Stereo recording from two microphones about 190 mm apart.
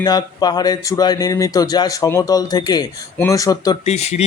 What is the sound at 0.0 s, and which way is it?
Speech, 20° left (ahead or behind).